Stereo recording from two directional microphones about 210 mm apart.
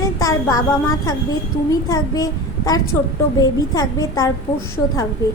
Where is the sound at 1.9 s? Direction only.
15° left (ahead or behind).